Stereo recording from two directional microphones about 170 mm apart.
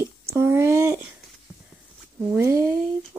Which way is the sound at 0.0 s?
15° right (ahead or behind).